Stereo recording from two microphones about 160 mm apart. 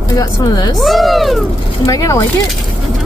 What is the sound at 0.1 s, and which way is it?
Speech, 25° left (ahead or behind).